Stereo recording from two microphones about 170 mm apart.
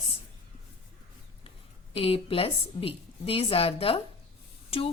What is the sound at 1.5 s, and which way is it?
A woman's voice, 35° left (ahead or behind).